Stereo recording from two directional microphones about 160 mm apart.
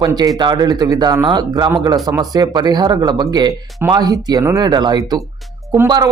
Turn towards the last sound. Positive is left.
turn(degrees=-25)  # may be behind; listen again after turning